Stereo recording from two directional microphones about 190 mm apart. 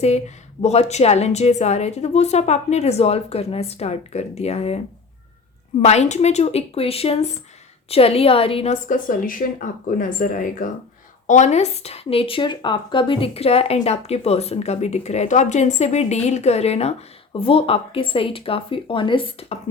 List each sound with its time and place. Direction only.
0.6 s speech: 35° left (ahead or behind)
5.8 s a woman's voice: 35° left (ahead or behind)